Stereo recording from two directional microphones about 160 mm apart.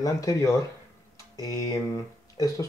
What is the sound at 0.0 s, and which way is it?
Speech, 20° left (ahead or behind).